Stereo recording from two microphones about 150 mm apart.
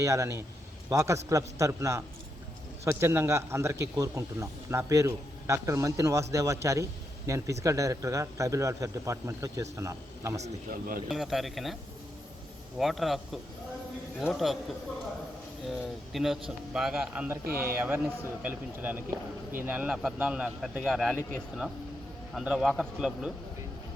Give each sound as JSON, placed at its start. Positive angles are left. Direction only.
{"t": 0.0, "sound": "speech", "side_deg": -20}
{"t": 10.7, "sound": "speech", "side_deg": -70}
{"t": 11.1, "sound": "speech", "side_deg": 0}
{"t": 12.8, "sound": "speech", "side_deg": 0}
{"t": 15.6, "sound": "a man's voice", "side_deg": 0}
{"t": 22.3, "sound": "speech", "side_deg": -5}